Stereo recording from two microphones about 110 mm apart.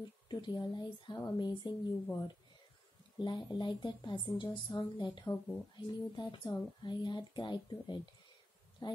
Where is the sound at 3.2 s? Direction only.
45° left (ahead or behind).